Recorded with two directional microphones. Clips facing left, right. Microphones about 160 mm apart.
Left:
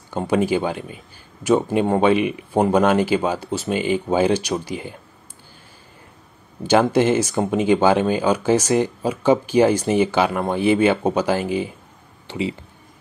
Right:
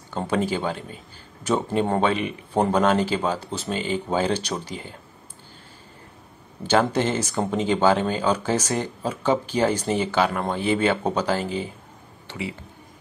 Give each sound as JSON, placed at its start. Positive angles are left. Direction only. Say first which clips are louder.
{"t": 0.1, "sound": "speech", "louder": "left 5 dB", "side_deg": 15}
{"t": 6.7, "sound": "speech", "louder": "left 5 dB", "side_deg": 15}